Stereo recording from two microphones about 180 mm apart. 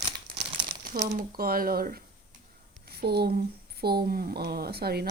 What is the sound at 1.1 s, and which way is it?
Speech, 55° right (ahead or behind).